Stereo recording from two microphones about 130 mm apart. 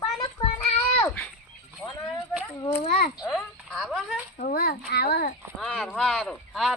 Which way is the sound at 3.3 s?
Centre (ahead or behind).